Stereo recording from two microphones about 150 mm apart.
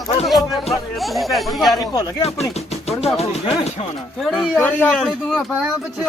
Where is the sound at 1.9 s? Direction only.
25° left (ahead or behind).